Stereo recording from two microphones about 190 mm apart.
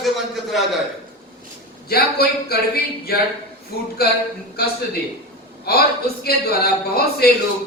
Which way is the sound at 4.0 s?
55° left (ahead or behind).